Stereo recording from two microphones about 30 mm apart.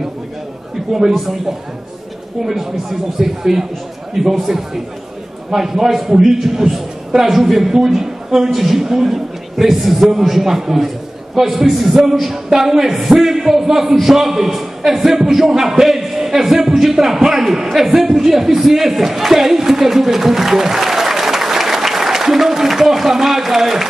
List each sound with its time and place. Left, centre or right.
0.9 s a man's voice: centre
2.5 s a man's voice: centre
11.9 s a man's voice: centre